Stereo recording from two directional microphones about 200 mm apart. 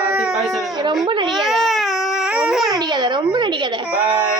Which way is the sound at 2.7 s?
20° right (ahead or behind).